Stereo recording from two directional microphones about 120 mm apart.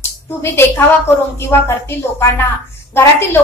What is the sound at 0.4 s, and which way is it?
A woman's voice, 20° left (ahead or behind).